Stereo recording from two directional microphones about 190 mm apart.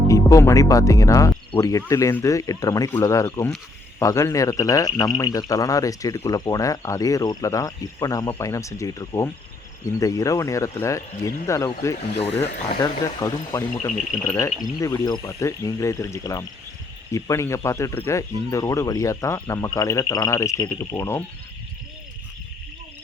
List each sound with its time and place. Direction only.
0.1 s speech: 15° left (ahead or behind)